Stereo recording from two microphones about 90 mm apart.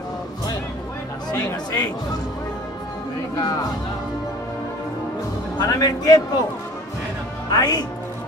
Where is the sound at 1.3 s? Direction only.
35° left (ahead or behind).